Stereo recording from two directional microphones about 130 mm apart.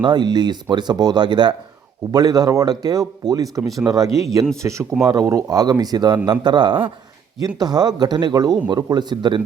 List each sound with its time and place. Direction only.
0.0 s speech: 35° right (ahead or behind)